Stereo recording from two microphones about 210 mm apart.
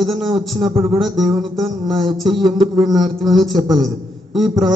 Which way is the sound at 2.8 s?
Centre (ahead or behind).